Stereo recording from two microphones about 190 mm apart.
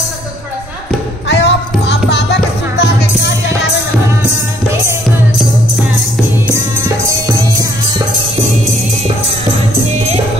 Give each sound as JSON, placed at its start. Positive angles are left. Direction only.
{"t": 1.3, "sound": "music", "side_deg": 65}